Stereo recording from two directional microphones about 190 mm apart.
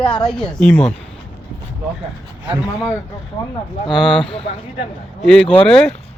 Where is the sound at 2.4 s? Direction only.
5° right (ahead or behind).